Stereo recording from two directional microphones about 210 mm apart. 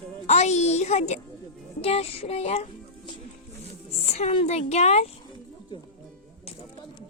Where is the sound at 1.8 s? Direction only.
30° left (ahead or behind).